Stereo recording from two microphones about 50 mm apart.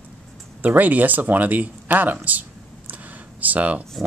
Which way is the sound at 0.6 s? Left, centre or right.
Right.